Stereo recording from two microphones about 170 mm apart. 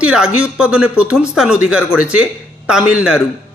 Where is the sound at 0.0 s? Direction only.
5° right (ahead or behind).